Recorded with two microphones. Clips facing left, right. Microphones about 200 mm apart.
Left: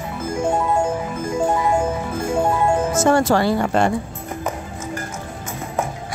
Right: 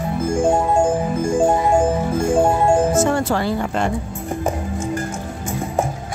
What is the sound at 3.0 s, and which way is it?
Speech, 85° left.